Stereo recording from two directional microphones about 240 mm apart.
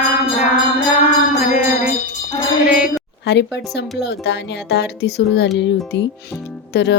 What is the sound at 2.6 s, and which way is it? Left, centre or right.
Speech, centre.